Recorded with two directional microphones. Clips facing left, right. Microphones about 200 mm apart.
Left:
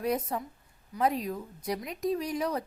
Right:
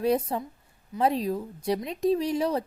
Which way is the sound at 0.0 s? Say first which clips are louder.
Right 5 dB; 30° right (ahead or behind).